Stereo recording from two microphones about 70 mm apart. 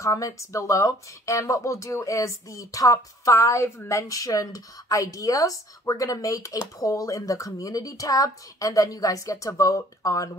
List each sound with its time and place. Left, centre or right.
0.0 s a woman's voice: left